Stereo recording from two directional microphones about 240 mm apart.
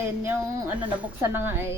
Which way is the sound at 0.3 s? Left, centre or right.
Centre.